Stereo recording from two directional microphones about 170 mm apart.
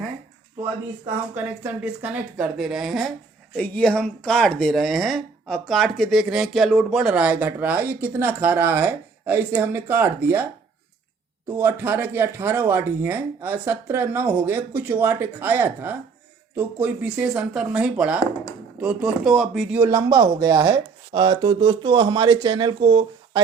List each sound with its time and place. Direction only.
1.6 s speech: 10° right (ahead or behind)
11.4 s speech: 15° right (ahead or behind)
19.8 s speech: 20° right (ahead or behind)